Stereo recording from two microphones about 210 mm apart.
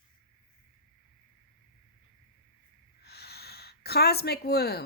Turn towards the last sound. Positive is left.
turn(degrees=50)  # may be behind; listen again after turning